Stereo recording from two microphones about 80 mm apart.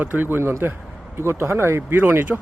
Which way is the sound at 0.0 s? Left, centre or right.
Right.